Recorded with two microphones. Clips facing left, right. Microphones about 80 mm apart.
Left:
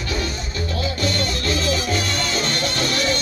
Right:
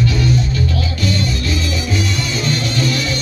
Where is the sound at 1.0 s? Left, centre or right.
Left.